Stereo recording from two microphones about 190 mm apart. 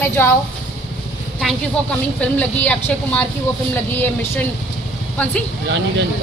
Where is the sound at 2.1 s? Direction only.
5° left (ahead or behind).